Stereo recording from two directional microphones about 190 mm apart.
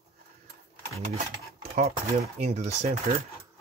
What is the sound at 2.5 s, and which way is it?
Speech, 35° right (ahead or behind).